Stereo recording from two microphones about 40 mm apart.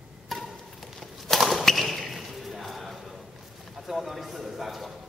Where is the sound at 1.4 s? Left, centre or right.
Centre.